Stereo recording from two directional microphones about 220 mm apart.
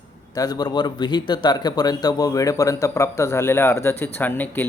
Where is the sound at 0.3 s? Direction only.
15° left (ahead or behind).